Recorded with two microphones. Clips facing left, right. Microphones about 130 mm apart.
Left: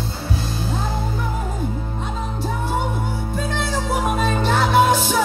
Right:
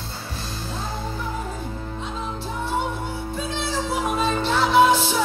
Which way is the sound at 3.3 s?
50° left (ahead or behind).